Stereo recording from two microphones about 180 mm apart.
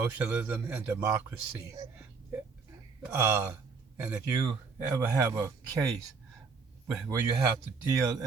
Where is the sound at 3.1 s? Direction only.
15° right (ahead or behind).